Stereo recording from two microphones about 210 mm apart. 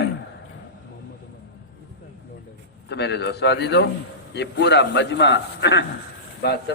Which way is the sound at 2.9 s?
55° left (ahead or behind).